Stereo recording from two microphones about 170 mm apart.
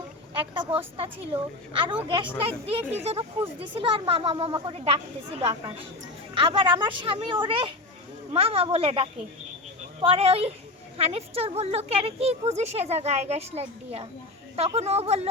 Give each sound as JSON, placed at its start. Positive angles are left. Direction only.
{"t": 0.3, "sound": "a woman's voice", "side_deg": -30}